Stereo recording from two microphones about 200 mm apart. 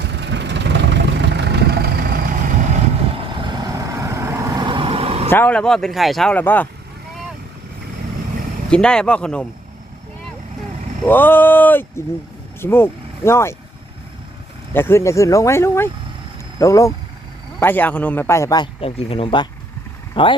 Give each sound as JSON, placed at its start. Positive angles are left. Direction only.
{"t": 0.0, "sound": "vehicle", "side_deg": -60}
{"t": 3.2, "sound": "vehicle", "side_deg": -25}
{"t": 5.3, "sound": "speech", "side_deg": 10}
{"t": 8.7, "sound": "speech", "side_deg": 5}
{"t": 11.0, "sound": "a man's voice", "side_deg": 10}
{"t": 14.7, "sound": "a man's voice", "side_deg": 10}